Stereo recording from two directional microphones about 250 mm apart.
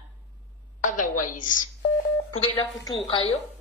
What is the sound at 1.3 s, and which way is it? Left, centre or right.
Speech, left.